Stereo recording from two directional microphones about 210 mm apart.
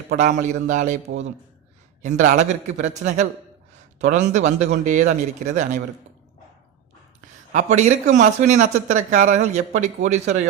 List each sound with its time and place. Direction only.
0.2 s a man's voice: 35° right (ahead or behind)
2.0 s a man's voice: 35° right (ahead or behind)
7.5 s a man's voice: 35° right (ahead or behind)